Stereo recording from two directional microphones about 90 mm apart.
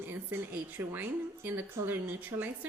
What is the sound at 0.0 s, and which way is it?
A woman's voice, 25° right (ahead or behind).